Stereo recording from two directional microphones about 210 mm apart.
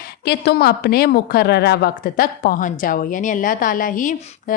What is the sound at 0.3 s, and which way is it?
A woman's voice, 50° left (ahead or behind).